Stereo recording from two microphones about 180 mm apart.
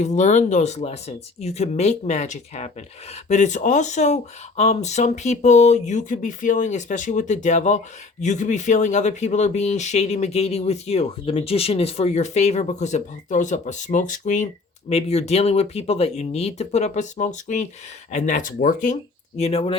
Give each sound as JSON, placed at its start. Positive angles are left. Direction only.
{"t": 0.0, "sound": "speech", "side_deg": 40}
{"t": 19.4, "sound": "speech", "side_deg": 35}